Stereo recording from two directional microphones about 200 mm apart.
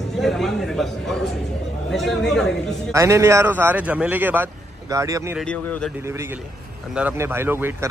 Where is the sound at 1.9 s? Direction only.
Centre (ahead or behind).